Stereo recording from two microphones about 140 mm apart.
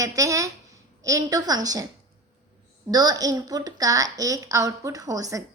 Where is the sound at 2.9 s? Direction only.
30° right (ahead or behind).